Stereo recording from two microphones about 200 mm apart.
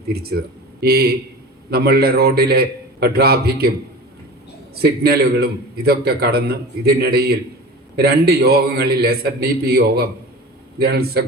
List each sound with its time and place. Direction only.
0.1 s a man's voice: 50° right (ahead or behind)
4.8 s a man's voice: 50° right (ahead or behind)